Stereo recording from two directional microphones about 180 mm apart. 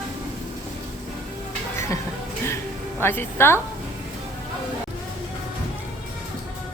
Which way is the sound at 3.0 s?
10° left (ahead or behind).